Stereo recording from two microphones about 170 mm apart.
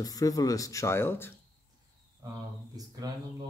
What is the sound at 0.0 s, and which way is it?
Speech, 20° left (ahead or behind).